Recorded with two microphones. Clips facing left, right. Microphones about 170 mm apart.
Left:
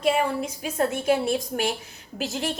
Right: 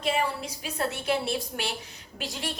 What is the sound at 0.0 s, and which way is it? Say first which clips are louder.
A woman's voice: left 5 dB; 50° left (ahead or behind).